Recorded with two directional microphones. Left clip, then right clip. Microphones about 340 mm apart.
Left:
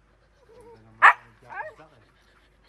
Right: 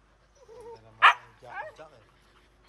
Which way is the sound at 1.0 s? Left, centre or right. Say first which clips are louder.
Left 3 dB; centre.